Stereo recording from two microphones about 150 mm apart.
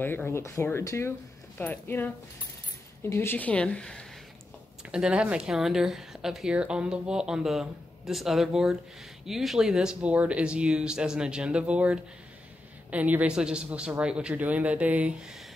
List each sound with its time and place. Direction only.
0.0 s speech: 15° left (ahead or behind)
4.9 s a woman's voice: 5° right (ahead or behind)